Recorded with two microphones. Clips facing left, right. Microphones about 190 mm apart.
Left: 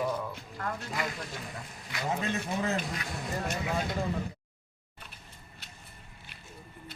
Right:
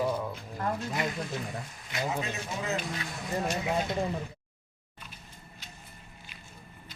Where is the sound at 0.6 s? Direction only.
25° right (ahead or behind).